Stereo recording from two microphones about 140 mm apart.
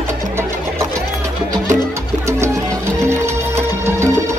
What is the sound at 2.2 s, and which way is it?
Music, 20° right (ahead or behind).